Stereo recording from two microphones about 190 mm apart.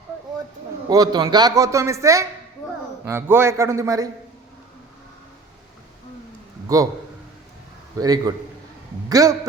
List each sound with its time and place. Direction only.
0.9 s a man's voice: 20° right (ahead or behind)
6.7 s a man's voice: 20° right (ahead or behind)
7.9 s a man's voice: 20° right (ahead or behind)